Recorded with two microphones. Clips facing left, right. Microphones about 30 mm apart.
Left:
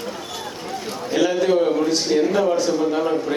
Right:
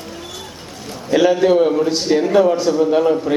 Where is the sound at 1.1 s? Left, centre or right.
Centre.